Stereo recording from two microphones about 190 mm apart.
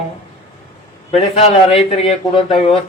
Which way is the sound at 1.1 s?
35° left (ahead or behind).